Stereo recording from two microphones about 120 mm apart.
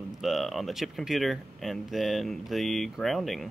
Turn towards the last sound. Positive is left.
turn(degrees=0)  # may be behind; listen again after turning